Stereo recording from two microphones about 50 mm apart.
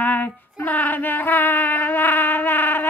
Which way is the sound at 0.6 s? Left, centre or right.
Left.